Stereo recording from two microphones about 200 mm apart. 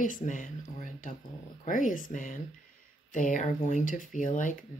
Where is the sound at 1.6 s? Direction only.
40° left (ahead or behind).